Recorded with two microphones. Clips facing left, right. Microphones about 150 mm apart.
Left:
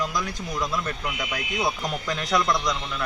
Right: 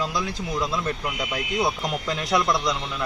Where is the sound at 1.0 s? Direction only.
Centre (ahead or behind).